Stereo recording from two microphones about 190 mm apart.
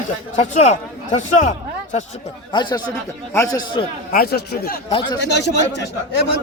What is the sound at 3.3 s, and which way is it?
Speech, 15° left (ahead or behind).